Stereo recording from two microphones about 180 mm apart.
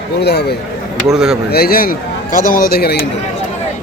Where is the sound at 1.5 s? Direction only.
55° left (ahead or behind).